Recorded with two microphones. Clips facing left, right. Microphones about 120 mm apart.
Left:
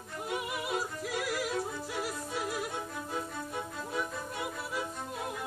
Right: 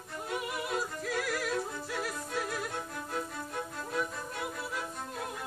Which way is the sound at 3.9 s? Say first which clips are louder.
Right 1 dB; 10° left (ahead or behind).